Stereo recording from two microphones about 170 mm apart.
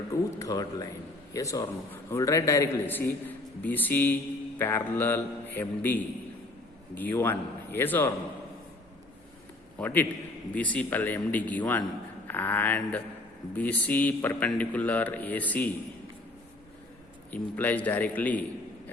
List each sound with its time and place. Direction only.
0.1 s a sound: 20° left (ahead or behind)
1.3 s a man's voice: 20° left (ahead or behind)
9.7 s a man's voice: 10° left (ahead or behind)
17.3 s a man's voice: 10° left (ahead or behind)